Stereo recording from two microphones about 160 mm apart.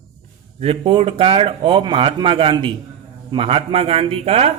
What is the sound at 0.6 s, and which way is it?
A man's voice, 35° right (ahead or behind).